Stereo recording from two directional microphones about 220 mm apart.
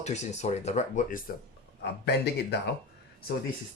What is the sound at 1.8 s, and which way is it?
Speech, 50° left (ahead or behind).